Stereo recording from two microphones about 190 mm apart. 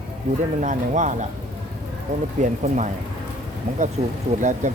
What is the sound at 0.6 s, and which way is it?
Speech, 40° right (ahead or behind).